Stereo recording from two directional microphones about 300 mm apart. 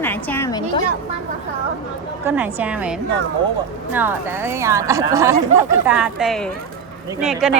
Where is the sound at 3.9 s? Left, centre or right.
Centre.